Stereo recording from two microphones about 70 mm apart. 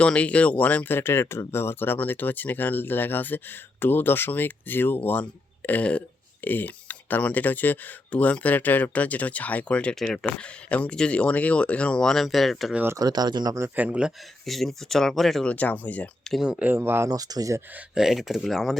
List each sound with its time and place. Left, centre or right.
0.0 s speech: centre
9.9 s speech: centre
13.0 s speech: right
13.7 s speech: centre
14.4 s speech: centre
15.4 s speech: left
16.4 s speech: centre
16.6 s speech: right
17.1 s speech: right
17.9 s speech: centre